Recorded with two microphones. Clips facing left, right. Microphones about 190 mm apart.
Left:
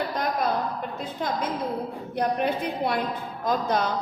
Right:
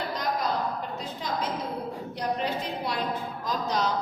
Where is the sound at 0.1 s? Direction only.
50° left (ahead or behind).